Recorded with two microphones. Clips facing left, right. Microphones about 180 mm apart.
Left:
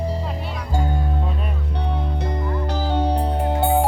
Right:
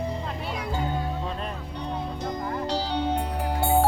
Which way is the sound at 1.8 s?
65° left (ahead or behind).